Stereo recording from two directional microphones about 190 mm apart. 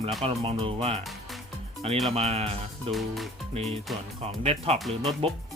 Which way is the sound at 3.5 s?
30° right (ahead or behind).